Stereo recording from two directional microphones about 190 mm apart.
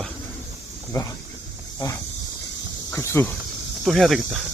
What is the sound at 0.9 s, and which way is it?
Speech, 15° left (ahead or behind).